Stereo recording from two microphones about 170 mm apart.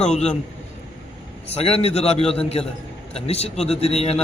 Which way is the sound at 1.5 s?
35° left (ahead or behind).